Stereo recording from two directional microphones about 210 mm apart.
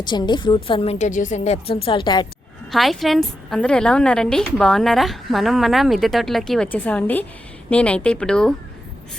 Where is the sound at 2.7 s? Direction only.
Centre (ahead or behind).